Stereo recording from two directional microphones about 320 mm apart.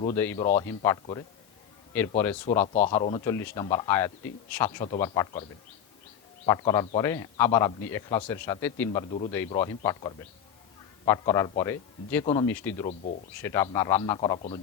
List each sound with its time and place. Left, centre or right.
0.5 s a man's voice: centre
2.7 s a man's voice: centre
12.8 s speech: left
13.4 s a man's voice: centre